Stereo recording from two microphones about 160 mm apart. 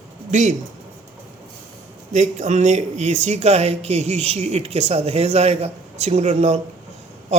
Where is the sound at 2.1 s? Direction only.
45° right (ahead or behind).